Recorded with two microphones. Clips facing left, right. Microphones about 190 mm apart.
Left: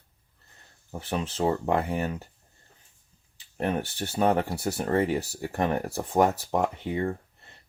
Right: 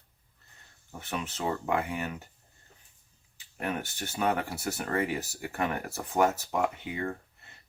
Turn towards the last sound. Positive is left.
turn(degrees=30)  # may be behind; listen again after turning